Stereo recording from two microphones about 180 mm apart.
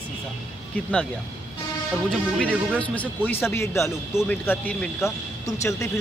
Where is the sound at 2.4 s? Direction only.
5° left (ahead or behind).